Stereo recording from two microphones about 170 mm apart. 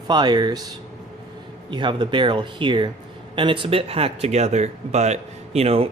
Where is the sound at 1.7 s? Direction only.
25° right (ahead or behind).